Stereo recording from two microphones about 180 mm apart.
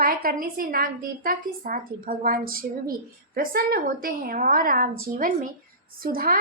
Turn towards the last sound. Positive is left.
turn(degrees=-55)  # may be behind; listen again after turning